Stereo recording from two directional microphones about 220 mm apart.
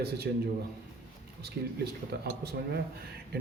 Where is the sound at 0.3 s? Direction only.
50° right (ahead or behind).